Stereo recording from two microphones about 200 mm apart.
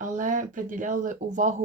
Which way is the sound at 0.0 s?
40° right (ahead or behind).